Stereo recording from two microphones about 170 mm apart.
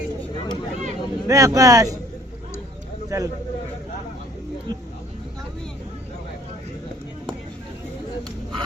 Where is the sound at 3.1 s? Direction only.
20° right (ahead or behind).